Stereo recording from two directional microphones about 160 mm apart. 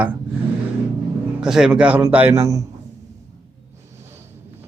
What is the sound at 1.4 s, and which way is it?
A man's voice, 5° right (ahead or behind).